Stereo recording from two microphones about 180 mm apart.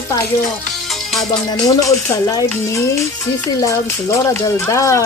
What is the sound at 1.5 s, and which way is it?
Speech, 20° left (ahead or behind).